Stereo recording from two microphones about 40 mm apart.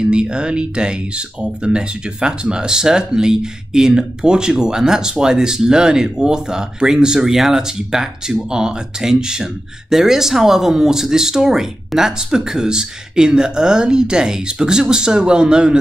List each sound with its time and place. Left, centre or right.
0.0 s speech: right